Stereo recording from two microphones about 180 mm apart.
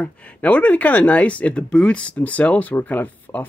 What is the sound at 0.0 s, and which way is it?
Speech, 5° left (ahead or behind).